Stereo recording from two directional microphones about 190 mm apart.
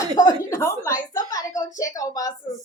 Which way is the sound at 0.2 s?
15° left (ahead or behind).